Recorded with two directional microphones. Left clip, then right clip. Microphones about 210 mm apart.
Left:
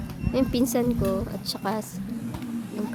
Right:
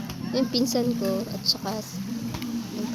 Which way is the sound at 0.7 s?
10° left (ahead or behind).